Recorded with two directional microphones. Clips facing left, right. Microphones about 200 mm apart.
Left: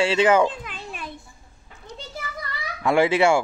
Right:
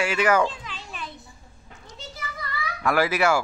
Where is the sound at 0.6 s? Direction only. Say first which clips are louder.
Left 3 dB; 55° left (ahead or behind).